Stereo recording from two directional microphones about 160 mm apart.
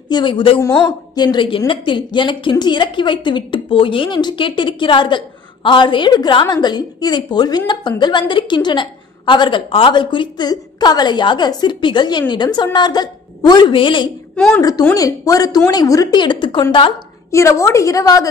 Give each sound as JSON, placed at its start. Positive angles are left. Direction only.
{"t": 0.1, "sound": "a woman's voice", "side_deg": 30}
{"t": 0.6, "sound": "a woman's voice", "side_deg": 20}
{"t": 14.3, "sound": "a woman's voice", "side_deg": 5}
{"t": 14.6, "sound": "a woman's voice", "side_deg": 25}
{"t": 17.3, "sound": "a woman's voice", "side_deg": 20}